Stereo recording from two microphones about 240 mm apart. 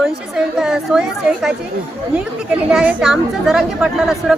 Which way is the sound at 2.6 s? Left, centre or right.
Centre.